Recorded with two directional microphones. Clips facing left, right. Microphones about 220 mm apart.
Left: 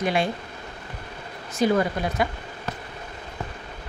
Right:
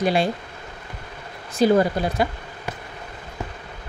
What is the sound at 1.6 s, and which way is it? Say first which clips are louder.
Speech: right 4 dB; 30° right (ahead or behind).